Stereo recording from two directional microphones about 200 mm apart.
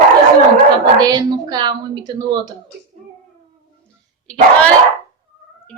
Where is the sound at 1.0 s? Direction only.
20° right (ahead or behind).